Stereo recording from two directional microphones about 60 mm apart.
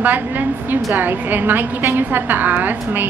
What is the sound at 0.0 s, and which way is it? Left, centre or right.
A woman's voice, right.